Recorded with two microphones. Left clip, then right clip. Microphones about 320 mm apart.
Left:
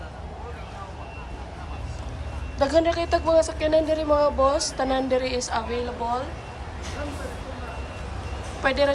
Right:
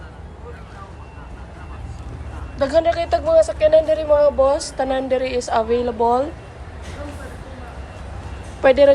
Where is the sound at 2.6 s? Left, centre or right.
Centre.